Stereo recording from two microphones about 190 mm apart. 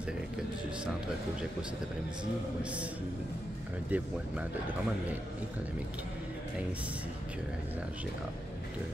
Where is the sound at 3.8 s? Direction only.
10° right (ahead or behind).